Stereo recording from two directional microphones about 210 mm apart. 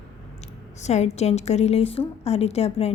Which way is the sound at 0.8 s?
30° left (ahead or behind).